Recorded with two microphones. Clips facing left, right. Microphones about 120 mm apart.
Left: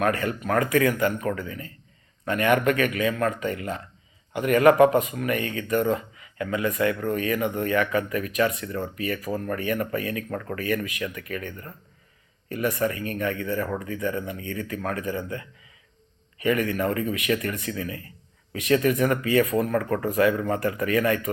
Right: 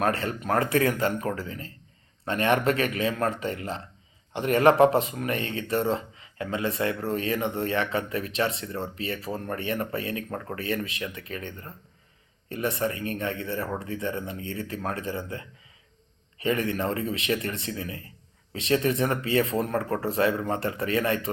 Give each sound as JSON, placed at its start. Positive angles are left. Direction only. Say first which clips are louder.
{"t": 0.0, "sound": "speech", "louder": "left 2 dB", "side_deg": -30}
{"t": 16.4, "sound": "speech", "louder": "left 3 dB", "side_deg": -25}